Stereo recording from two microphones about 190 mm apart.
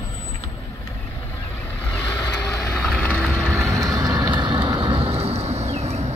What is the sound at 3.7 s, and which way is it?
Vehicle, 15° right (ahead or behind).